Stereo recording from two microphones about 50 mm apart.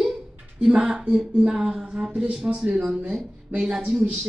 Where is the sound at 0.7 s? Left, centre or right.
Centre.